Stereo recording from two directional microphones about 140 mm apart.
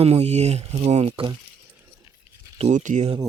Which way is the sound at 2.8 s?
65° right (ahead or behind).